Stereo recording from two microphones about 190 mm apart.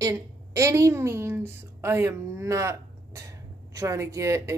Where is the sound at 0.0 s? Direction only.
15° right (ahead or behind).